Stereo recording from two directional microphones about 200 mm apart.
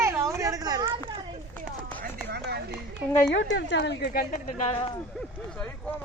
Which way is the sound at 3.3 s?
60° left (ahead or behind).